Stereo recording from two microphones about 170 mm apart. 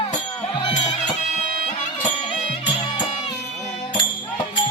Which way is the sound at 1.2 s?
45° left (ahead or behind).